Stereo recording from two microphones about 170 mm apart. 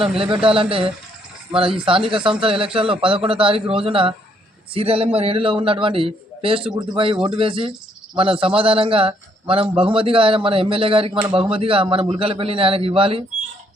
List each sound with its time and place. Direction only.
0.4 s a man's voice: 30° right (ahead or behind)